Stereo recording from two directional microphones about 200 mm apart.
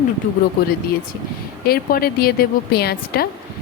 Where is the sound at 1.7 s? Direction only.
50° left (ahead or behind).